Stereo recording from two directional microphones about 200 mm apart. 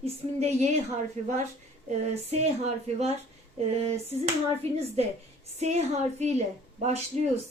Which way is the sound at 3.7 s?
30° right (ahead or behind).